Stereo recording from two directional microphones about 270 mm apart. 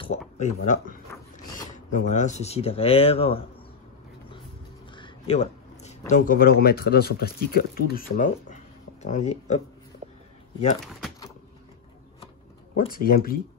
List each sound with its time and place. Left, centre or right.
0.0 s speech: left
4.9 s speech: centre
12.7 s speech: left